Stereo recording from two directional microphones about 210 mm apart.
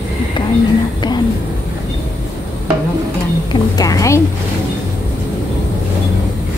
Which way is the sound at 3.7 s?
15° left (ahead or behind).